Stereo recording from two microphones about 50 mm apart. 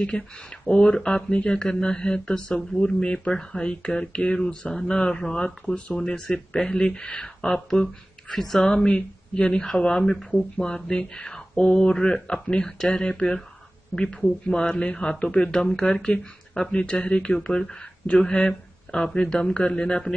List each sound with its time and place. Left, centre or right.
0.7 s speech: centre